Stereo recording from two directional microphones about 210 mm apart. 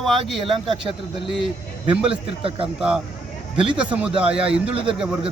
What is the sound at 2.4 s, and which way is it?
Speech, 25° right (ahead or behind).